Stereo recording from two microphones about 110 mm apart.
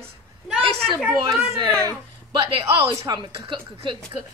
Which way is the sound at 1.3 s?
5° left (ahead or behind).